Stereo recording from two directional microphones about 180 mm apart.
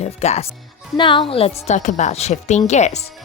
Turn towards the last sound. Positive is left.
turn(degrees=40)  # may be behind; listen again after turning